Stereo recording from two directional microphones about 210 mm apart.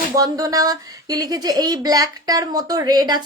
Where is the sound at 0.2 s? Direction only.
15° right (ahead or behind).